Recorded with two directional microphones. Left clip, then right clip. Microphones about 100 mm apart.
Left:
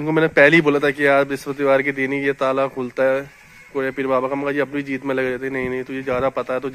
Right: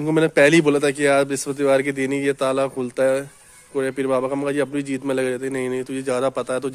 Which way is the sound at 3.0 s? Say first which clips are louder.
Left 1 dB; 30° right (ahead or behind).